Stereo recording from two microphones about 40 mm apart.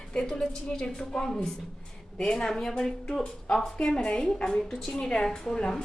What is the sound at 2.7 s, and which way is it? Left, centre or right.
Speech, left.